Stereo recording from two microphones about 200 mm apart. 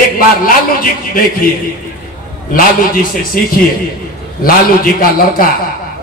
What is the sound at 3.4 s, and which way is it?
A man's voice, 50° left (ahead or behind).